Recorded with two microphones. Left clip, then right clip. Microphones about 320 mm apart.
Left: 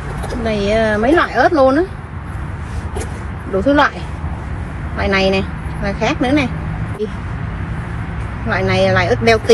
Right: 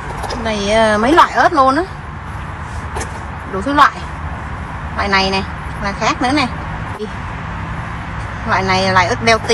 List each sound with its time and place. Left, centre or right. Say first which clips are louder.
0.4 s speech: right 2 dB; centre
3.6 s speech: right 2 dB; centre
4.9 s a woman's voice: even; centre
8.5 s speech: even; centre